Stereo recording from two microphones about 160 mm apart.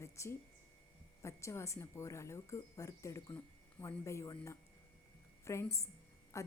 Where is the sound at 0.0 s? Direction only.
20° left (ahead or behind).